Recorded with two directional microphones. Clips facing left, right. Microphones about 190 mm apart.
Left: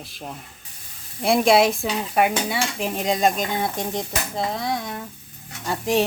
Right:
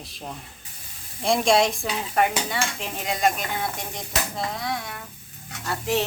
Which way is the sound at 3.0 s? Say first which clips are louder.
Left 3 dB; 20° left (ahead or behind).